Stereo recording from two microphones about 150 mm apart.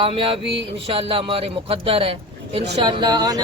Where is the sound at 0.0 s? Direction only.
35° right (ahead or behind).